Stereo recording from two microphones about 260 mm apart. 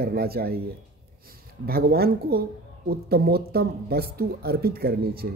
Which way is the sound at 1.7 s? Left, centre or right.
Right.